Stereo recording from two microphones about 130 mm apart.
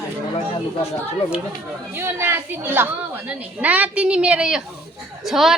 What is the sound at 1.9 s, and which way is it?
A woman's voice, 20° right (ahead or behind).